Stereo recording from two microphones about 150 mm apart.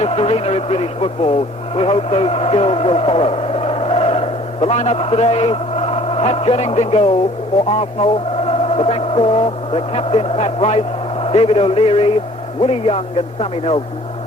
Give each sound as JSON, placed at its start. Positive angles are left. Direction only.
{"t": 0.0, "sound": "speech", "side_deg": 40}